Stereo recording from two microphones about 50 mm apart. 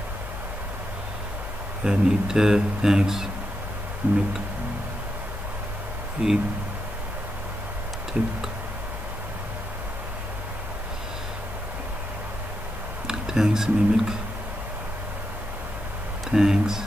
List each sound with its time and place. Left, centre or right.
1.9 s speech: centre
4.0 s music: right
6.2 s speech: centre
13.0 s speech: centre
16.3 s speech: centre